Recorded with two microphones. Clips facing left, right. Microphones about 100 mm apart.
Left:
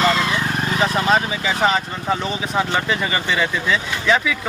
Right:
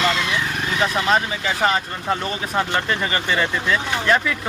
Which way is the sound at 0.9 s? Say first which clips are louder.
Left 1 dB; 5° left (ahead or behind).